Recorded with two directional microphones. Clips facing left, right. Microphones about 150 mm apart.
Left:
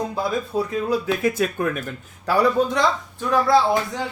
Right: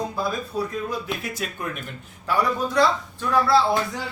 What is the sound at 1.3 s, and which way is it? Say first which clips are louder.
Speech: left 9 dB; 55° left (ahead or behind).